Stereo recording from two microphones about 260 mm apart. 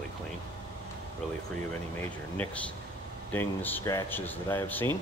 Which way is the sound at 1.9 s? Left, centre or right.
Centre.